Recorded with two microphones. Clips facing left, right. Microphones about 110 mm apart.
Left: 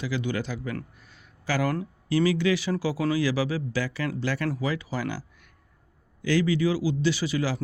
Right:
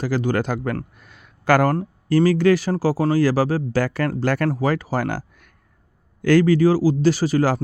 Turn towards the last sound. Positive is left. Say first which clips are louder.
# right 8 dB
turn(degrees=-45)  # may be behind; listen again after turning